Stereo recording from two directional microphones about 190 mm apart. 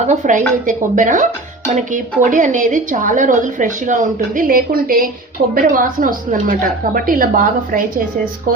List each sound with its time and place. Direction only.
0.0 s speech: 40° right (ahead or behind)